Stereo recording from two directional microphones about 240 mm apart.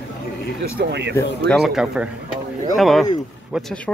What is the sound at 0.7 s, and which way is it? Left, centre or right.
Speech, right.